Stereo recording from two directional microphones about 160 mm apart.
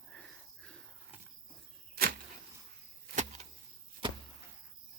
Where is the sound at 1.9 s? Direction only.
65° right (ahead or behind).